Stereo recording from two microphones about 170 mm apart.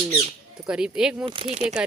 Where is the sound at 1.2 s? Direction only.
35° right (ahead or behind).